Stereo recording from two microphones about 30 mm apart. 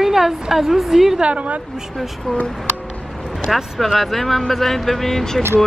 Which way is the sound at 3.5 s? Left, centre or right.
Centre.